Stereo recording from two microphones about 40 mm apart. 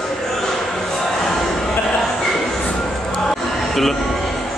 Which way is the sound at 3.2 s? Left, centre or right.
Centre.